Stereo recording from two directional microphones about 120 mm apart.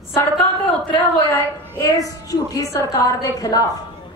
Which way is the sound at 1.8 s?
30° left (ahead or behind).